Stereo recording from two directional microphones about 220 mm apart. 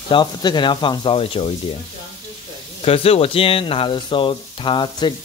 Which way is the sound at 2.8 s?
25° left (ahead or behind).